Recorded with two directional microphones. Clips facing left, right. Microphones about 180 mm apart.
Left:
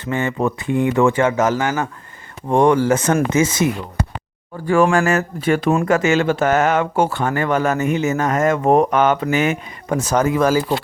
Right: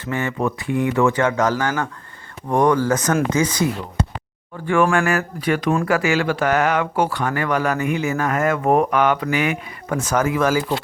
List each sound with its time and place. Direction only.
0.0 s speech: 20° left (ahead or behind)
4.6 s speech: 35° left (ahead or behind)
5.0 s speech: 25° left (ahead or behind)